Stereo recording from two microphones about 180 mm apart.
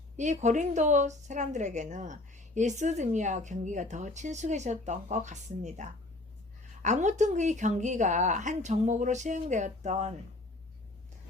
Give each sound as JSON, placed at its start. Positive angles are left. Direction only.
{"t": 0.2, "sound": "a woman's voice", "side_deg": -40}